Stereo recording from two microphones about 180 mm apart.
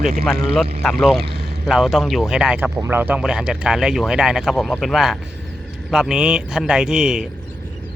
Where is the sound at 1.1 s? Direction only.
65° right (ahead or behind).